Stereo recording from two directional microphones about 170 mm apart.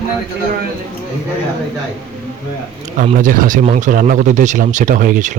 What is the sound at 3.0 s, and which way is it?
Speech, 50° right (ahead or behind).